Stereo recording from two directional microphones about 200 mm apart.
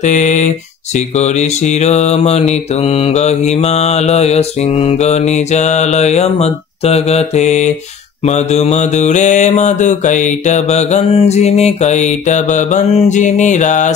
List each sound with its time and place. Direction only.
0.0 s mantra: 35° left (ahead or behind)